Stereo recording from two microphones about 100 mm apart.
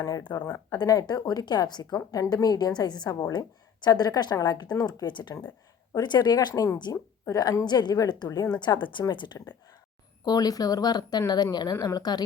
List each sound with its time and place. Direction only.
0.2 s a woman's voice: 50° left (ahead or behind)
0.4 s speech: 25° left (ahead or behind)
0.8 s a woman's voice: 40° left (ahead or behind)